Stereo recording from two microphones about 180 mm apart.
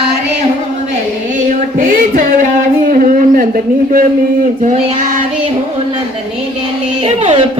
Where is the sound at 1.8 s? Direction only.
50° right (ahead or behind).